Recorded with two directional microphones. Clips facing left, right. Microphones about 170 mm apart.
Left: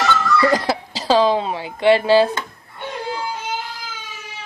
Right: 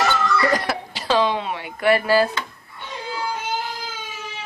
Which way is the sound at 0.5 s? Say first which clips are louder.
Left 3 dB; 30° left (ahead or behind).